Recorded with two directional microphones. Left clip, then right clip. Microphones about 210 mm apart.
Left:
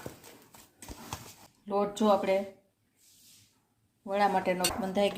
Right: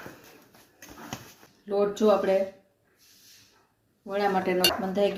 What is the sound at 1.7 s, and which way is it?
Speech, 35° left (ahead or behind).